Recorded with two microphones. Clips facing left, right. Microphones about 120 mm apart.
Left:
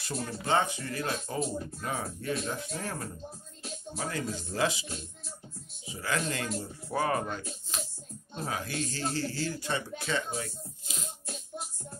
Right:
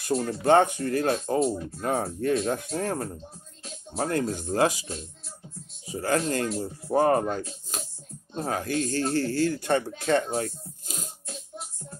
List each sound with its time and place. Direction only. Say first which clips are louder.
0.1 s speech: right 9 dB; 35° right (ahead or behind)
0.5 s speech: right 9 dB; 50° right (ahead or behind)
5.9 s speech: right 7 dB; 40° right (ahead or behind)